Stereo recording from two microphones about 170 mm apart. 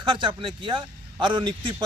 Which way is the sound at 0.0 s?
30° right (ahead or behind).